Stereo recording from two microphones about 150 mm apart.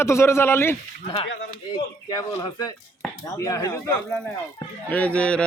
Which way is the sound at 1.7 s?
30° left (ahead or behind).